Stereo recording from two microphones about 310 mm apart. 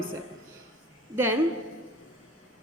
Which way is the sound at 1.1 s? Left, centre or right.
Centre.